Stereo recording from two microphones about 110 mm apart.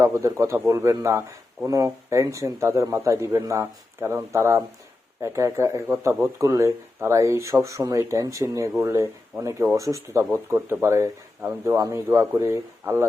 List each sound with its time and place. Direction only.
0.0 s speech: 25° right (ahead or behind)